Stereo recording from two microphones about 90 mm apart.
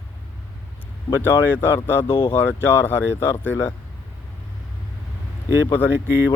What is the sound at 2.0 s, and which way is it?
Speech, 90° left.